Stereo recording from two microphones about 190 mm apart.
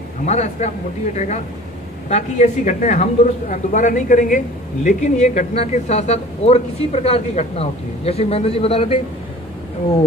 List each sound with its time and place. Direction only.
0.2 s a man's voice: 35° left (ahead or behind)